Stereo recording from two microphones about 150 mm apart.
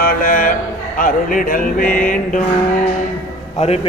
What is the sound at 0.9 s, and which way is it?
Speech, 65° left (ahead or behind).